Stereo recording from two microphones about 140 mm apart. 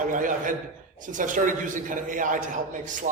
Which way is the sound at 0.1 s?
70° right (ahead or behind).